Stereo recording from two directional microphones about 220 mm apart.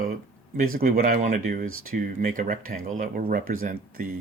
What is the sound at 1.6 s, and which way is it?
Speech, 70° right (ahead or behind).